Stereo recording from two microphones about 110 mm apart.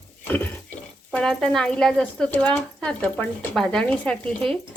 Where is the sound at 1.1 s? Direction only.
5° left (ahead or behind).